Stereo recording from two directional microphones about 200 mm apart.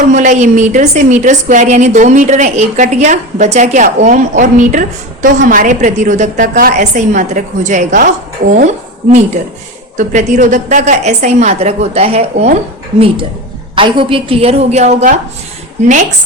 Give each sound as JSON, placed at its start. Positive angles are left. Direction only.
{"t": 0.1, "sound": "a woman's voice", "side_deg": -35}
{"t": 13.7, "sound": "a woman's voice", "side_deg": -25}